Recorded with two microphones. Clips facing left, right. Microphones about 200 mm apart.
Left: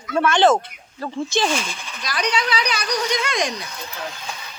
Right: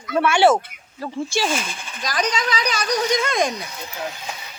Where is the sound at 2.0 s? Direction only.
45° right (ahead or behind).